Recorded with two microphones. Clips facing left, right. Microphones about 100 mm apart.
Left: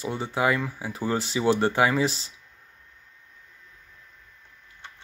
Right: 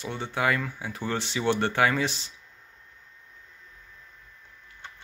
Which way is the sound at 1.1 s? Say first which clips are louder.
Left 3 dB; 35° left (ahead or behind).